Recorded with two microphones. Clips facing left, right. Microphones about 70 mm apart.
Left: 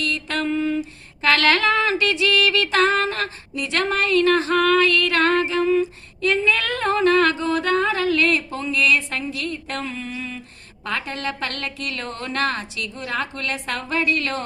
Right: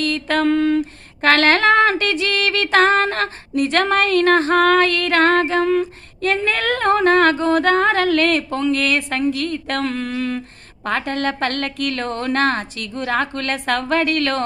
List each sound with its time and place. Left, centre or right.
0.0 s mantra: right
0.4 s speech: right
10.8 s speech: right